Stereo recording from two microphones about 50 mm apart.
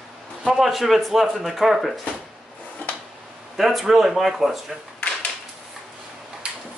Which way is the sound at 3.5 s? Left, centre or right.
Centre.